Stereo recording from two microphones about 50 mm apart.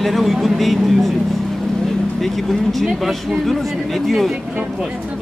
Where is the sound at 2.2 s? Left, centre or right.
Centre.